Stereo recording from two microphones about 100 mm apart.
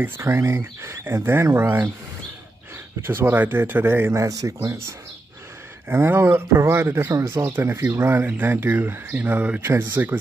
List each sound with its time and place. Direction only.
0.0 s speech: 30° right (ahead or behind)
3.0 s speech: 25° right (ahead or behind)
5.9 s speech: 25° right (ahead or behind)